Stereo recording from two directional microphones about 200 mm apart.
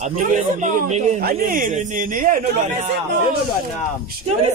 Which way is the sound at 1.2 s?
45° right (ahead or behind).